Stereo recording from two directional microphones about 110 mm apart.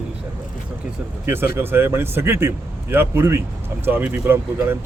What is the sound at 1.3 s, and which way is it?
Speech, 20° right (ahead or behind).